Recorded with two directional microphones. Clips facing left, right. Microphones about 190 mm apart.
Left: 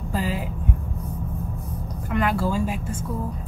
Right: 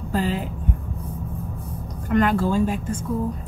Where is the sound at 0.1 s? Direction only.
5° left (ahead or behind).